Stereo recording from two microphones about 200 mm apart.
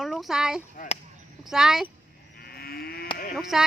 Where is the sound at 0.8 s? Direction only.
40° left (ahead or behind).